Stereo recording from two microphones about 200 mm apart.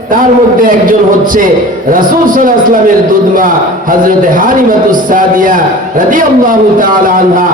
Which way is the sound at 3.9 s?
45° right (ahead or behind).